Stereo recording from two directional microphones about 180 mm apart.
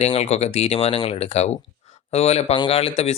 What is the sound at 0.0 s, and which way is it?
Speech, 35° left (ahead or behind).